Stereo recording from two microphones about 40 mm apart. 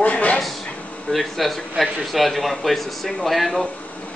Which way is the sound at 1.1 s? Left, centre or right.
Centre.